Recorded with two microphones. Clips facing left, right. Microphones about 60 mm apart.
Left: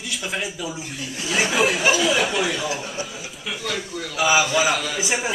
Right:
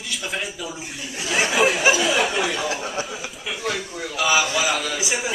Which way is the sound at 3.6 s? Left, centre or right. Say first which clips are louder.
Right 2 dB; right.